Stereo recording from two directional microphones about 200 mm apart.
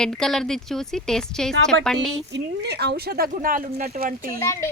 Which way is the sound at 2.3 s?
55° right (ahead or behind).